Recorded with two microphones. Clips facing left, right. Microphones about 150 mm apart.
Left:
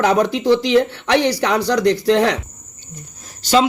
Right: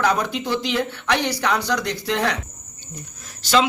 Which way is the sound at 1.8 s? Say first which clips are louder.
Left 11 dB; 65° left (ahead or behind).